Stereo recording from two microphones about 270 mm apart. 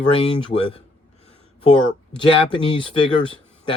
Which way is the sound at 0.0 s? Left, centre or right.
Centre.